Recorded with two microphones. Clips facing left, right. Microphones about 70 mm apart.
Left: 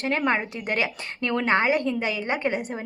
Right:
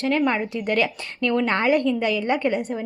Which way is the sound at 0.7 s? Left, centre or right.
Centre.